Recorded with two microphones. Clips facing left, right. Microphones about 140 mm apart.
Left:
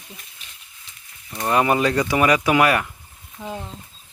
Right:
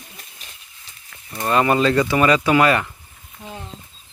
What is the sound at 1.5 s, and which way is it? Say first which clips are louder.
Speech: right 2 dB; 15° left (ahead or behind).